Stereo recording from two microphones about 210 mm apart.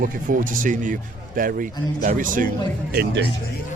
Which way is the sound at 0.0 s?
40° right (ahead or behind).